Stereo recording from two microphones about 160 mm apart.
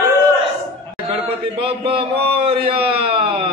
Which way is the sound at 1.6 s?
35° right (ahead or behind).